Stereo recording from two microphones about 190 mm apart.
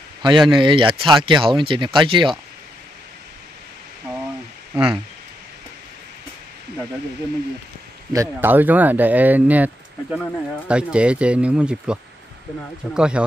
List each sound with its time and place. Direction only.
0.2 s speech: 25° right (ahead or behind)
4.7 s speech: 5° right (ahead or behind)
8.1 s speech: 15° right (ahead or behind)